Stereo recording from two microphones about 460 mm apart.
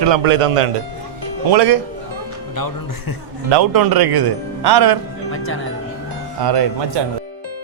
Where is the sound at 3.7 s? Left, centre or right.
Right.